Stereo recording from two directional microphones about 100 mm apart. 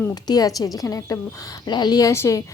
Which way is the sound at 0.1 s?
40° left (ahead or behind).